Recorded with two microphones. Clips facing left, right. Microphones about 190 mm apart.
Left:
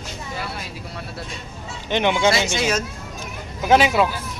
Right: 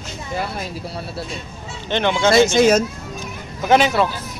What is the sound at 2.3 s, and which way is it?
Speech, 45° right (ahead or behind).